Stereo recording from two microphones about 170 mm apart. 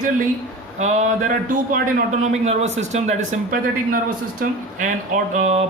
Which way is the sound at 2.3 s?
40° right (ahead or behind).